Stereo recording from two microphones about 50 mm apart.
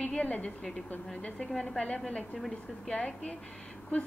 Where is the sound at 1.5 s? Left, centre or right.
Centre.